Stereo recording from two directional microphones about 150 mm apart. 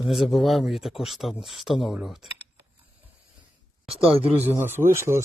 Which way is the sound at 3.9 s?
40° right (ahead or behind).